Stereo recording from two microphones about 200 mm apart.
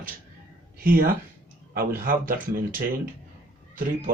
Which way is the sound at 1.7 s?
45° right (ahead or behind).